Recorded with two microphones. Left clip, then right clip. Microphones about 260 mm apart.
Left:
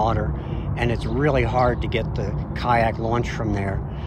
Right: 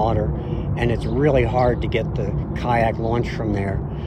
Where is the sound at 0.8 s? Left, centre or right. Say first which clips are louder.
Right 2 dB; left.